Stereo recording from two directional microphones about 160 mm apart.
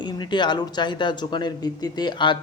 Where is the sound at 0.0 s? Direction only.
30° left (ahead or behind).